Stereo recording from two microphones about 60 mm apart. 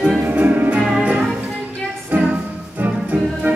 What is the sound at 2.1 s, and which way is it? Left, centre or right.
Music, right.